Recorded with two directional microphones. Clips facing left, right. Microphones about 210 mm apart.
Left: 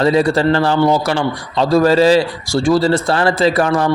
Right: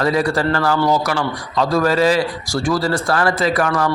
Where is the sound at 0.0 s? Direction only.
25° left (ahead or behind).